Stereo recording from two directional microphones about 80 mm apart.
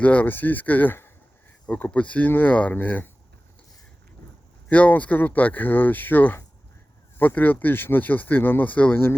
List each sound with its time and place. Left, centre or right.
0.0 s speech: centre
1.6 s speech: centre
4.2 s a sound: left
4.7 s speech: centre